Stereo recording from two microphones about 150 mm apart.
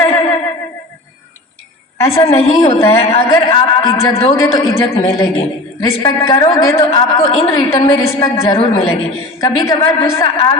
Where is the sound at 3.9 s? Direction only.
20° left (ahead or behind).